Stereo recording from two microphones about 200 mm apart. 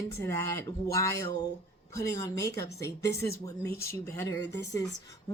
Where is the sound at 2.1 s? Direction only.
15° left (ahead or behind).